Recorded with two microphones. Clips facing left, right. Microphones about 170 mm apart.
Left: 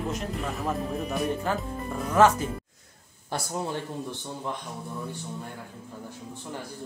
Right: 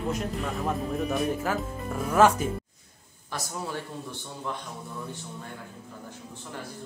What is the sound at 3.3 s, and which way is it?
Speech, 25° left (ahead or behind).